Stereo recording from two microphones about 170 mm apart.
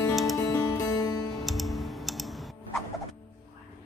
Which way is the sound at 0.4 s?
20° left (ahead or behind).